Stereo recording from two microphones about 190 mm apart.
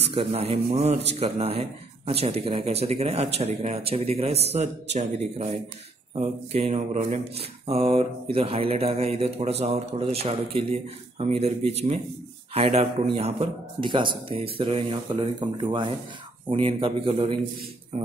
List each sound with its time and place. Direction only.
0.0 s speech: 30° right (ahead or behind)